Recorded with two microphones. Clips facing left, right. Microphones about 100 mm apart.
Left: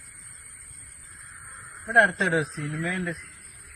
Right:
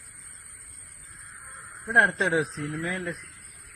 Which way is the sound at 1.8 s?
20° right (ahead or behind).